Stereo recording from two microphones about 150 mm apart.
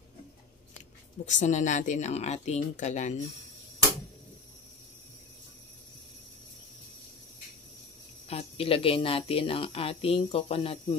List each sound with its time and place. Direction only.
1.2 s speech: 50° left (ahead or behind)
8.3 s speech: 40° left (ahead or behind)